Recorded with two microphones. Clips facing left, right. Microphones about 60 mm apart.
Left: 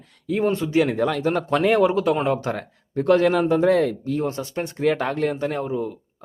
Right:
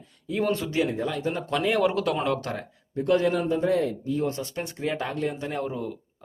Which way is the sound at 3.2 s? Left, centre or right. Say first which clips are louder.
Left 6 dB; left.